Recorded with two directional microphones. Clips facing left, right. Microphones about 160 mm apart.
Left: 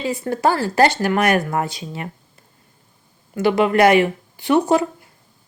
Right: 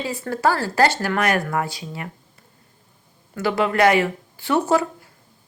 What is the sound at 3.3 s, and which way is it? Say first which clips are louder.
A woman's voice: left 4 dB; 20° left (ahead or behind).